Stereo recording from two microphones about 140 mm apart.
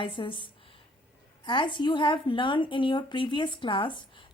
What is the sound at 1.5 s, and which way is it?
A woman's voice, 35° left (ahead or behind).